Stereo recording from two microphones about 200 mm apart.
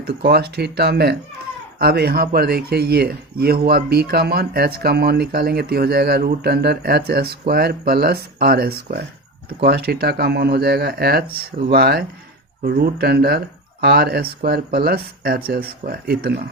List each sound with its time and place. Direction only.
0.0 s speech: 55° right (ahead or behind)